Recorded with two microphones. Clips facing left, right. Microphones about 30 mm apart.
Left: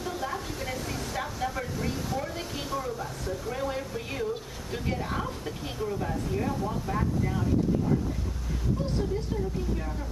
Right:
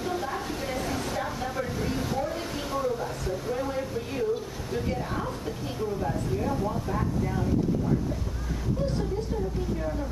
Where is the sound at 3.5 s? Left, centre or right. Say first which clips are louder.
Right 2 dB; centre.